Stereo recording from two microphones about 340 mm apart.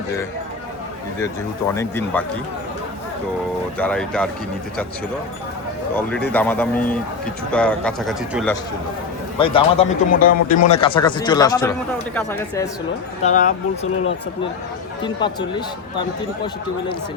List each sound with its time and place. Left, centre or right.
1.2 s a man's voice: centre
3.8 s speech: centre
6.0 s speech: centre
9.4 s a man's voice: centre
13.2 s speech: left
15.0 s a man's voice: centre